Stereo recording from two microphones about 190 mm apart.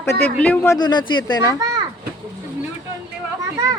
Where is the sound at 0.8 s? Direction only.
20° left (ahead or behind).